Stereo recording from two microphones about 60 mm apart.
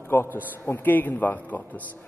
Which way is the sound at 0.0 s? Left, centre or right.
Left.